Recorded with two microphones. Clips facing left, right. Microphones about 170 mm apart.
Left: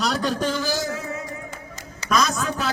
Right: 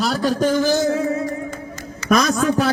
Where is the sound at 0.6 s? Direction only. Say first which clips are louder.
Right 9 dB; 25° right (ahead or behind).